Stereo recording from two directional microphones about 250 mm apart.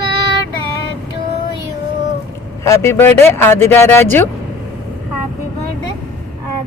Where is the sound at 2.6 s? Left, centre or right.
Centre.